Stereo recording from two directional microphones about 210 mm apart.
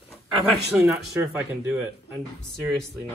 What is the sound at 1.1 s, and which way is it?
Speech, 15° right (ahead or behind).